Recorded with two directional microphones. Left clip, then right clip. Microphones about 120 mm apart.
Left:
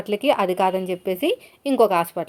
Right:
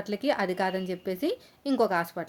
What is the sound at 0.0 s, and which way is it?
A woman's voice, 15° left (ahead or behind).